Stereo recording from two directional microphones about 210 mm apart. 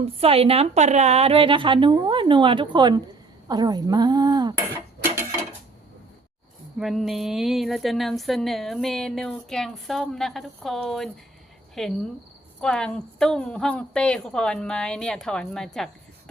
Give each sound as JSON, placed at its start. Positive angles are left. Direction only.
{"t": 0.0, "sound": "a woman's voice", "side_deg": -30}
{"t": 6.7, "sound": "speech", "side_deg": 0}